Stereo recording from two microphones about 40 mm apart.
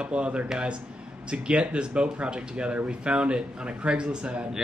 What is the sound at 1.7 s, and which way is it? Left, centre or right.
Speech, right.